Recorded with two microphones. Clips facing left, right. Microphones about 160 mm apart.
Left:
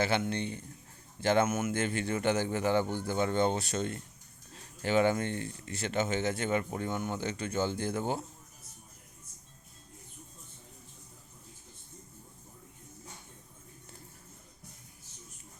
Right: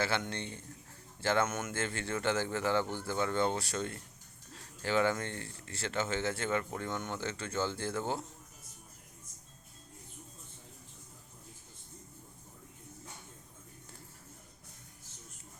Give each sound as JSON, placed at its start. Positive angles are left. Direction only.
{"t": 0.2, "sound": "speech", "side_deg": 15}